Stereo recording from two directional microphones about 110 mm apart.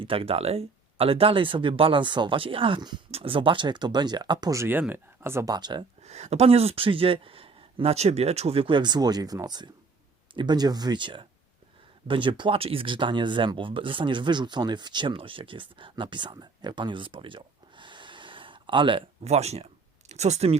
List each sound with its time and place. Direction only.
0.0 s speech: 55° right (ahead or behind)
3.1 s speech: 60° right (ahead or behind); by 4.5 s 40° right (ahead or behind)
4.5 s speech: 20° right (ahead or behind)
5.5 s speech: 40° right (ahead or behind)
6.0 s speech: 85° right; by 19.0 s 50° right (ahead or behind)
19.2 s speech: 80° right